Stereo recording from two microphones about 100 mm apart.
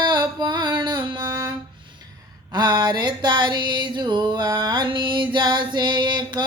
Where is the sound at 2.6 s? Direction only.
45° right (ahead or behind).